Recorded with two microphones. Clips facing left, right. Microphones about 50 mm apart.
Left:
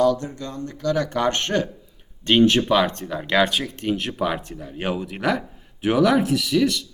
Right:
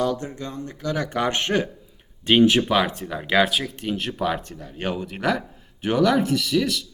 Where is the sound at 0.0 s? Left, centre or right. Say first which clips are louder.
Left 5 dB; right; by 6.8 s centre.